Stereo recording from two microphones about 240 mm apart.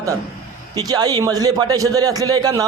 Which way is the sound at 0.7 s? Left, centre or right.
Centre.